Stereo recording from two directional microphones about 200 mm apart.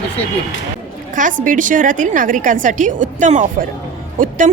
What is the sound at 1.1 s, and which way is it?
A woman's voice, 40° right (ahead or behind).